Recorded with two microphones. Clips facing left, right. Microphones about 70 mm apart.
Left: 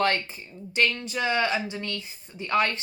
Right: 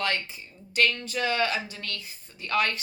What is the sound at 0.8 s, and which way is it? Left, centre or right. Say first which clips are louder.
Speech: even; centre.